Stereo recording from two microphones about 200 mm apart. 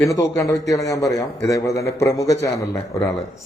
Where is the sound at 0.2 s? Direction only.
15° left (ahead or behind).